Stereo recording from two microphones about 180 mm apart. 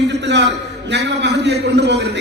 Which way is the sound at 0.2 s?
75° right (ahead or behind).